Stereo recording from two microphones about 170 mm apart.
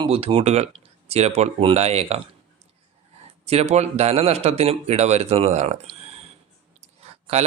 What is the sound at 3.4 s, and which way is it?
Speech, 40° right (ahead or behind).